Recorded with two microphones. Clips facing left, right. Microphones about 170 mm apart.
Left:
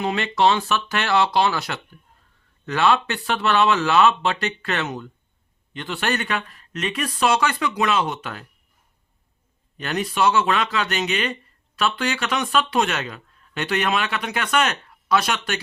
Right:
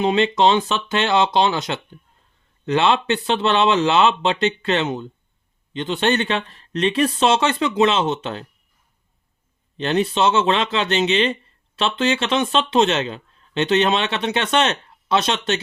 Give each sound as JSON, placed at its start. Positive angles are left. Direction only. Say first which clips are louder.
{"t": 0.0, "sound": "speech", "louder": "right 4 dB", "side_deg": -20}
{"t": 9.7, "sound": "speech", "louder": "right 5 dB", "side_deg": -25}